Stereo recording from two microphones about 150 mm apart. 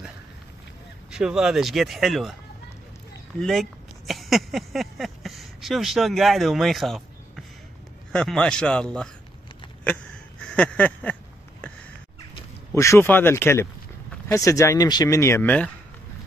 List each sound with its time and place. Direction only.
1.1 s speech: 5° right (ahead or behind)
3.3 s speech: centre (ahead or behind)
10.5 s a sound: 10° left (ahead or behind)
12.7 s speech: 20° left (ahead or behind)